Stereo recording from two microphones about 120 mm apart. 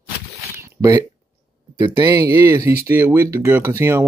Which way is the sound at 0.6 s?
30° right (ahead or behind).